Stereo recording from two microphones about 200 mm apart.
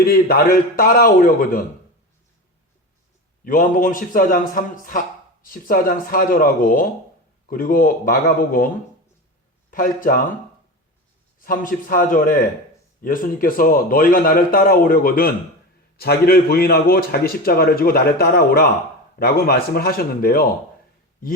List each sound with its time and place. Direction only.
0.0 s a man's voice: 50° left (ahead or behind)
3.4 s a man's voice: 45° left (ahead or behind)
11.4 s a man's voice: 45° left (ahead or behind)